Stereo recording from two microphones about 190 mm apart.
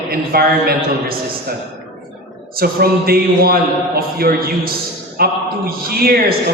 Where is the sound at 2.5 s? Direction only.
55° right (ahead or behind).